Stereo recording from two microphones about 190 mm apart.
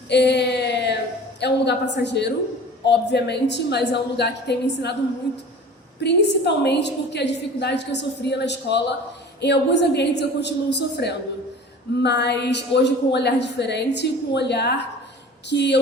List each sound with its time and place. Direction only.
0.1 s a sound: 60° left (ahead or behind)
1.4 s a woman's voice: 65° left (ahead or behind)
6.0 s a woman's voice: 60° left (ahead or behind)